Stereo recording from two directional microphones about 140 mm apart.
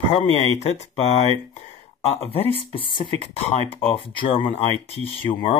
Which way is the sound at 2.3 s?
40° left (ahead or behind).